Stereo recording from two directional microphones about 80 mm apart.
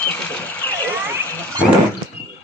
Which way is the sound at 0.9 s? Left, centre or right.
Right.